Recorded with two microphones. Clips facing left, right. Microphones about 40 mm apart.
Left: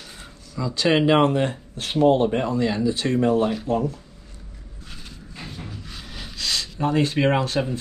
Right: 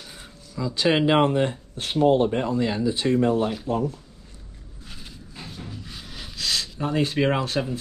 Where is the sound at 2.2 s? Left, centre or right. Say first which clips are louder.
Left 2 dB; left.